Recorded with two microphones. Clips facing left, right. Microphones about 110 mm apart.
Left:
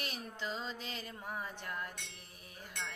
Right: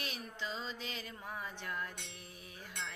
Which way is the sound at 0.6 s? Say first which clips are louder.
Left 1 dB; 45° left (ahead or behind).